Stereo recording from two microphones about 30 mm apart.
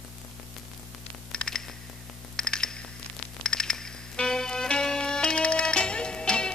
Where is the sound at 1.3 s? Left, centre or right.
Left.